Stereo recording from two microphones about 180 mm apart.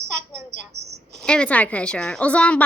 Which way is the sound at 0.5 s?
70° right (ahead or behind).